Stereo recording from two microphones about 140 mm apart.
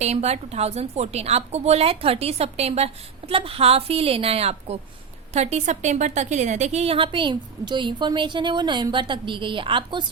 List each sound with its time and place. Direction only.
0.0 s a woman's voice: 50° right (ahead or behind)